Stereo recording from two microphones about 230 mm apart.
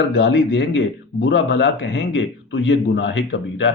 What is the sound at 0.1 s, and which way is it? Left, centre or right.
Speech, left.